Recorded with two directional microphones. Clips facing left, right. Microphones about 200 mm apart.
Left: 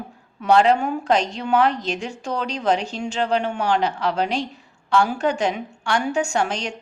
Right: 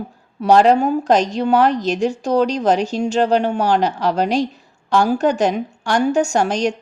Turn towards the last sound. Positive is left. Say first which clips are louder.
# right 6 dB
turn(degrees=-40)  # may be behind; listen again after turning